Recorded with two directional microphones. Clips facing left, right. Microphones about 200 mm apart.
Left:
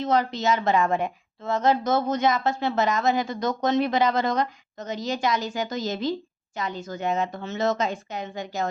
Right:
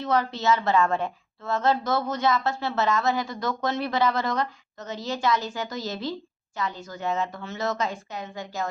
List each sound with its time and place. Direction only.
0.0 s a woman's voice: 15° left (ahead or behind)